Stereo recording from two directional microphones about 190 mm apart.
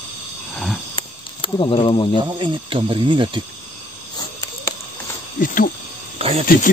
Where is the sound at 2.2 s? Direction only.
25° right (ahead or behind).